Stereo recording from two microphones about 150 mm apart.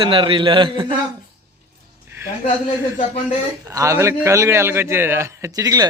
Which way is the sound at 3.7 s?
20° right (ahead or behind).